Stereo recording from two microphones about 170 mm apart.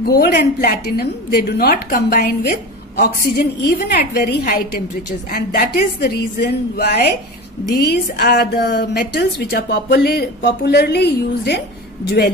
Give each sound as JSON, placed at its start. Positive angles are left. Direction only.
{"t": 0.0, "sound": "a woman's voice", "side_deg": 65}
{"t": 5.9, "sound": "a woman's voice", "side_deg": 75}